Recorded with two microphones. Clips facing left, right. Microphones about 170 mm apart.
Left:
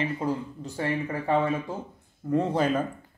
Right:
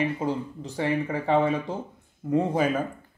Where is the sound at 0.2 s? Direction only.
20° right (ahead or behind).